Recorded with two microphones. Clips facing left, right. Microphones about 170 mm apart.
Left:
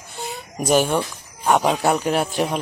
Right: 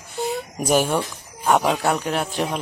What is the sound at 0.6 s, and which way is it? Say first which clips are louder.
Speech: left 2 dB; 5° right (ahead or behind).